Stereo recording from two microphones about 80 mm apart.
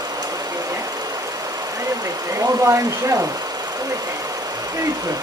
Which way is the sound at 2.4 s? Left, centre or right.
Right.